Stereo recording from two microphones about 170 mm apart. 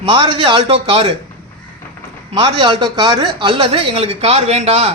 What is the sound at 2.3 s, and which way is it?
A man's voice, 25° right (ahead or behind).